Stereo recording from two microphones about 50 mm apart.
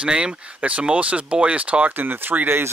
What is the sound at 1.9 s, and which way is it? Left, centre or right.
Speech, right.